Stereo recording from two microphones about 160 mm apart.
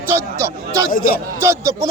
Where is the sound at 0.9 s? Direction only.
60° left (ahead or behind).